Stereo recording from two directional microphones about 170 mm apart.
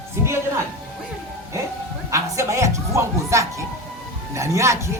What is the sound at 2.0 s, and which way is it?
Speech, 20° right (ahead or behind).